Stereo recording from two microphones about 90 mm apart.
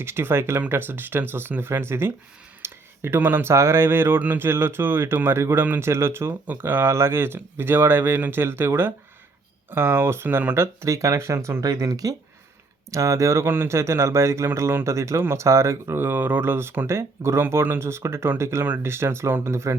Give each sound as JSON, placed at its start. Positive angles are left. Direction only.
{"t": 0.0, "sound": "speech", "side_deg": -25}